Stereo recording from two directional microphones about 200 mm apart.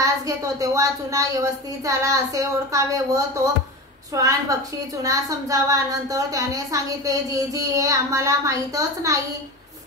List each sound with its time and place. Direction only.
0.0 s a woman's voice: 15° right (ahead or behind)